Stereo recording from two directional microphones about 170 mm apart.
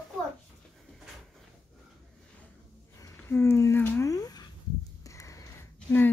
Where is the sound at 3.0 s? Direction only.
15° left (ahead or behind).